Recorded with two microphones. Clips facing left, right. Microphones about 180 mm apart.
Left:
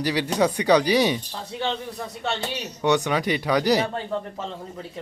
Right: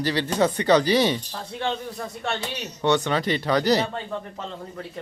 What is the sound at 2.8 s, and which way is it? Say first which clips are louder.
Speech: even; 15° left (ahead or behind).